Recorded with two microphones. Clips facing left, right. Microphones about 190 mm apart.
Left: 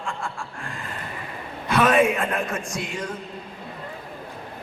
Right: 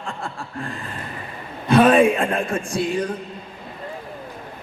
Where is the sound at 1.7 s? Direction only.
30° right (ahead or behind).